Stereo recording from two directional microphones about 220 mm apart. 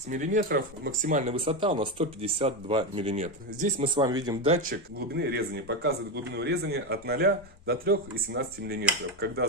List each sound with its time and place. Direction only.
0.1 s speech: 35° right (ahead or behind)
4.6 s a man's voice: 50° right (ahead or behind)